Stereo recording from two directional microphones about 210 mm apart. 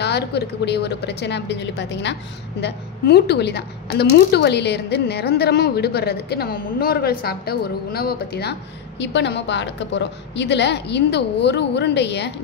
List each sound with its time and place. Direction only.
0.0 s a woman's voice: 50° left (ahead or behind)